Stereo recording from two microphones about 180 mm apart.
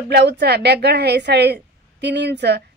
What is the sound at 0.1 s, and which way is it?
A woman's voice, 70° right (ahead or behind).